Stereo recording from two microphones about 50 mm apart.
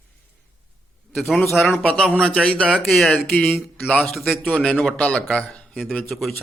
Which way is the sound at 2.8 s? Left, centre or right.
Centre.